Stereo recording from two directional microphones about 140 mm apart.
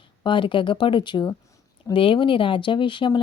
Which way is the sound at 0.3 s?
35° left (ahead or behind).